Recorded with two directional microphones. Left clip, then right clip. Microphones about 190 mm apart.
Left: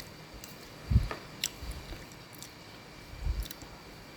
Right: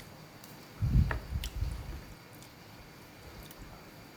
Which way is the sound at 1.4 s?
30° left (ahead or behind).